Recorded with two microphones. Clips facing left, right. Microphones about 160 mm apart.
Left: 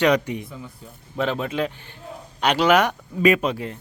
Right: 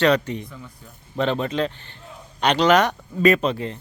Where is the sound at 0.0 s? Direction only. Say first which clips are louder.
Even; 10° left (ahead or behind).